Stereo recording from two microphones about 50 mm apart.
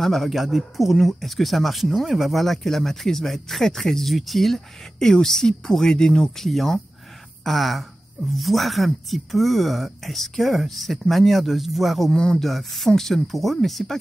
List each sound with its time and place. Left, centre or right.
0.0 s speech: centre
12.1 s speech: centre
12.4 s speech: centre